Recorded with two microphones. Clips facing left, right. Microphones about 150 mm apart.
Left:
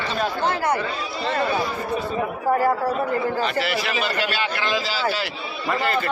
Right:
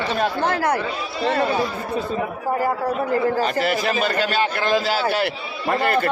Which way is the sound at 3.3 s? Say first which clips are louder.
Right 3 dB; 40° right (ahead or behind).